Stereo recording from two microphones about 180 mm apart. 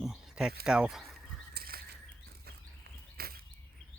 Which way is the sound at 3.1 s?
55° right (ahead or behind).